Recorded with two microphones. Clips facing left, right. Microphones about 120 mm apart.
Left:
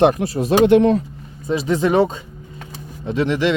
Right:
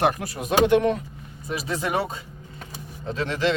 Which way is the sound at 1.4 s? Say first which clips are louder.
Left 9 dB; 25° left (ahead or behind).